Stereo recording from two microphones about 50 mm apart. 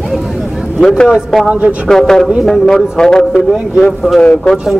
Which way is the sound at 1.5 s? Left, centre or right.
Right.